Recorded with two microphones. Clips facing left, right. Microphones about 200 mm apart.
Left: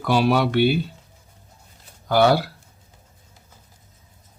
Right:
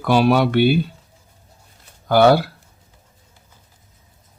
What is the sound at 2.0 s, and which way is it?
Speech, 55° right (ahead or behind).